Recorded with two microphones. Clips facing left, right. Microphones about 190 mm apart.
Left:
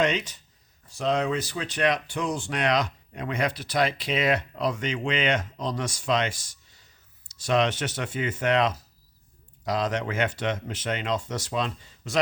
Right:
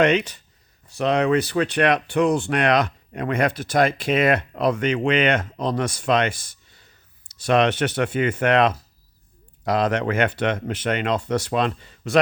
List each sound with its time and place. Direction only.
0.0 s speech: 60° right (ahead or behind)